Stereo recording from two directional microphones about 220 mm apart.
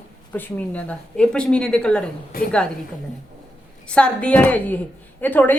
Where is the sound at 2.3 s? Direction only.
40° left (ahead or behind).